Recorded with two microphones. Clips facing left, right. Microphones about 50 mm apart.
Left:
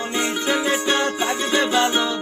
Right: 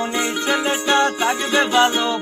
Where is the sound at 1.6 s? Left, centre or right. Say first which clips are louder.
Right 4 dB; right.